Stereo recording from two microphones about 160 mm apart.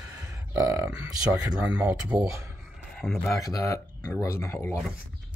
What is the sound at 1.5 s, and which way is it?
Speech, 5° right (ahead or behind).